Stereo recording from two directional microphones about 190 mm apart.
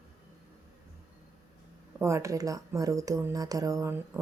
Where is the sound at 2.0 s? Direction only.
15° right (ahead or behind).